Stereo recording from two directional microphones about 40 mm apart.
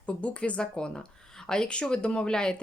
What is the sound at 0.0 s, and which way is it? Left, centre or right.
Speech, left.